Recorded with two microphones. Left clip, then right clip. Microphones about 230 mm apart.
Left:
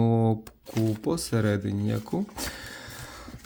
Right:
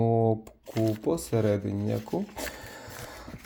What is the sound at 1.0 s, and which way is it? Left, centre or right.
Speech, left.